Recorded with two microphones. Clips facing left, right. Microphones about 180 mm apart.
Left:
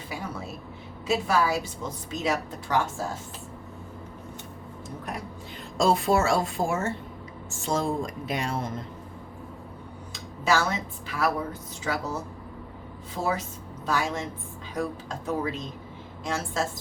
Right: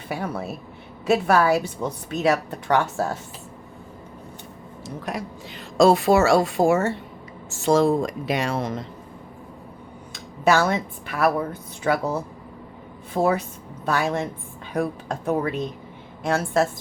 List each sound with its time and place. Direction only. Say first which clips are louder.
0.1 s a woman's voice: right 8 dB; 65° right (ahead or behind)
5.1 s a woman's voice: right 6 dB; 90° right
5.7 s speech: right 6 dB; 75° right (ahead or behind)
10.4 s a woman's voice: right 6 dB; 60° right (ahead or behind)